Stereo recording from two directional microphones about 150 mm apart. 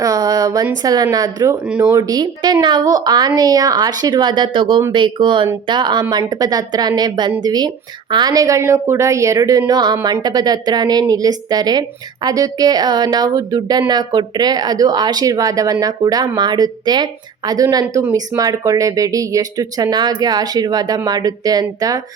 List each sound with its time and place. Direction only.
0.0 s a sound: 25° right (ahead or behind)
0.8 s a woman's voice: 25° right (ahead or behind)
1.6 s speech: 10° right (ahead or behind)
2.0 s a woman's voice: 25° right (ahead or behind)